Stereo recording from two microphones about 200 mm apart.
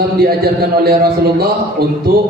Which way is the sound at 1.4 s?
50° right (ahead or behind).